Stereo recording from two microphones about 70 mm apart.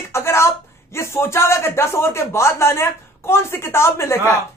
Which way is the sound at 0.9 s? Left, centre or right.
Left.